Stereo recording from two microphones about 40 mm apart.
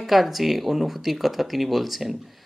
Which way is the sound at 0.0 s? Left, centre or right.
Centre.